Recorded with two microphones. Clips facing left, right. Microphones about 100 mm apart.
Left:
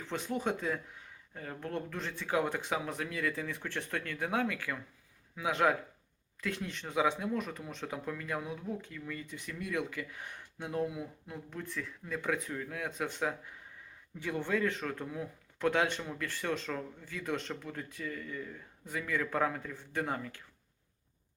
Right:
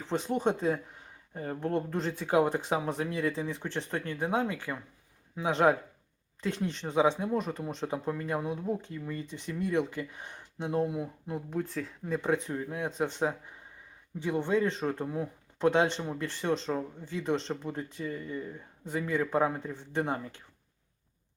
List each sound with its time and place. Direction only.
0.0 s speech: 30° right (ahead or behind)